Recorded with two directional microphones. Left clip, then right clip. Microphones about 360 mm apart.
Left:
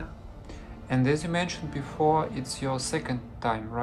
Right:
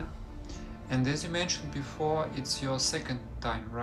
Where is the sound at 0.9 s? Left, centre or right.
Centre.